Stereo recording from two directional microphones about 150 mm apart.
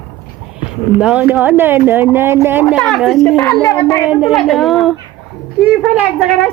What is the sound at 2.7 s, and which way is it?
Speech, centre (ahead or behind).